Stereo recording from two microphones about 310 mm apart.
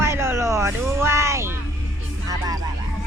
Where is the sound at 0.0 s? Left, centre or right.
Centre.